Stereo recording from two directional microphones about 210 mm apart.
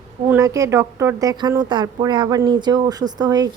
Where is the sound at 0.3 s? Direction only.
15° right (ahead or behind).